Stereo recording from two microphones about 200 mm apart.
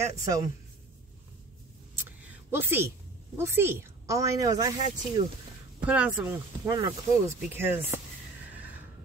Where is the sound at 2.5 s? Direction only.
10° right (ahead or behind).